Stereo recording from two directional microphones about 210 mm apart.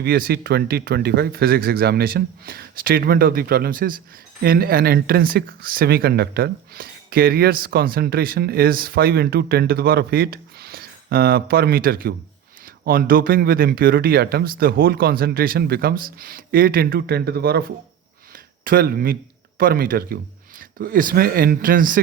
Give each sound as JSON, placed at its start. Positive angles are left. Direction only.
{"t": 0.0, "sound": "speech", "side_deg": -45}
{"t": 18.6, "sound": "speech", "side_deg": -45}